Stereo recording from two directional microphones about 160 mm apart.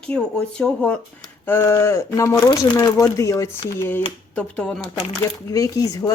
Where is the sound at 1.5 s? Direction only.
15° left (ahead or behind).